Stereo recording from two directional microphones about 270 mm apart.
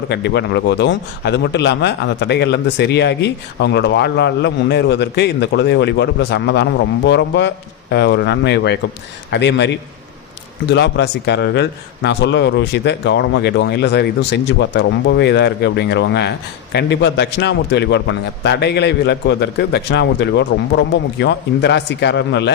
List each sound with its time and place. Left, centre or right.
0.1 s a man's voice: left